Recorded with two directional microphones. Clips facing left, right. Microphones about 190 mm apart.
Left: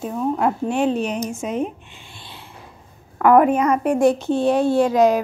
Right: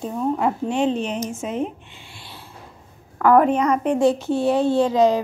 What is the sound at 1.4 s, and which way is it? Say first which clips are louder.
Speech: left 2 dB; 15° left (ahead or behind).